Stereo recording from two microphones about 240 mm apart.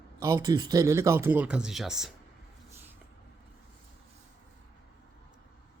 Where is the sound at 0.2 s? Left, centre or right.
Centre.